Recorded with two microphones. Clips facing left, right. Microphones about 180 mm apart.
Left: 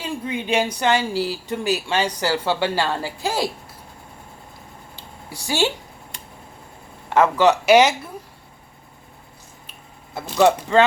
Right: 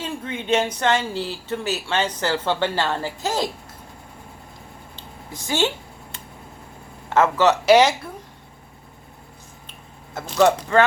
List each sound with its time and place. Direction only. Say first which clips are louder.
0.0 s speech: left 2 dB; 10° left (ahead or behind)
5.5 s speech: left 1 dB; 20° right (ahead or behind)
7.1 s speech: left 1 dB; 15° left (ahead or behind)
10.2 s speech: left 1 dB; 15° left (ahead or behind)